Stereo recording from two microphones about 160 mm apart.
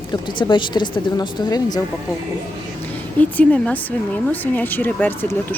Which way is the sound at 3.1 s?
10° left (ahead or behind).